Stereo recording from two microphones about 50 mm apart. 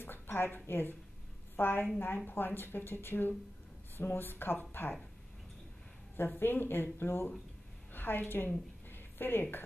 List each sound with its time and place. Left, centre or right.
0.0 s a sound: left
0.7 s speech: left
6.1 s a woman's voice: left